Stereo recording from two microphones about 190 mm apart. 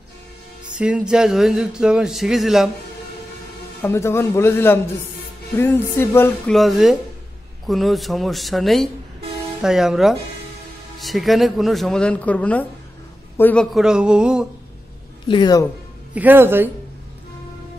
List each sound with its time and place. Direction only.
0.7 s a man's voice: 5° right (ahead or behind)
3.8 s a man's voice: 15° left (ahead or behind)
6.5 s a man's voice: centre (ahead or behind)
15.2 s a woman's voice: 25° left (ahead or behind)
16.2 s speech: 10° right (ahead or behind)